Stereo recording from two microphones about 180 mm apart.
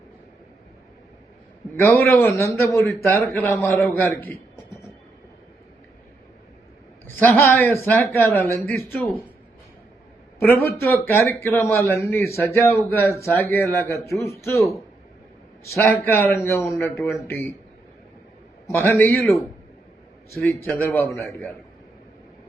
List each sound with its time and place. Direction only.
1.8 s a man's voice: 15° left (ahead or behind)
7.2 s a man's voice: 10° left (ahead or behind)
10.4 s a man's voice: 10° left (ahead or behind)
15.7 s a man's voice: 10° left (ahead or behind)
18.7 s a man's voice: 10° left (ahead or behind)
20.6 s a man's voice: 10° left (ahead or behind)